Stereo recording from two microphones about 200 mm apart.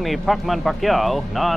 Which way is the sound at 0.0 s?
Centre (ahead or behind).